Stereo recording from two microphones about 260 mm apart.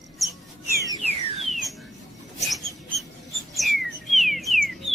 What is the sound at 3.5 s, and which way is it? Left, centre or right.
Bird, centre.